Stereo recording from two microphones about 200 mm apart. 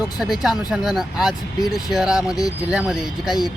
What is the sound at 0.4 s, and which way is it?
Speech, 5° right (ahead or behind).